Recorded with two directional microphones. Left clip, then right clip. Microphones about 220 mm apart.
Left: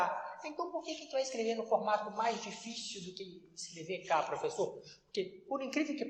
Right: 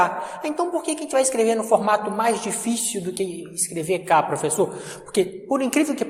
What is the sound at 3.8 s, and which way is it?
A woman's voice, 45° right (ahead or behind).